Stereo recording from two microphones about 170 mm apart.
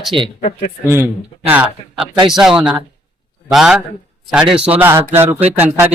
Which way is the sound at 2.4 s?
5° right (ahead or behind).